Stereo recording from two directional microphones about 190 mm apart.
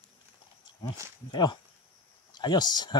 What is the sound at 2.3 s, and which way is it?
Speech, 20° left (ahead or behind).